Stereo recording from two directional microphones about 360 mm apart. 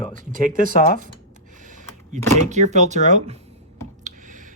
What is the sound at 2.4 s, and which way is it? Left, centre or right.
Speech, centre.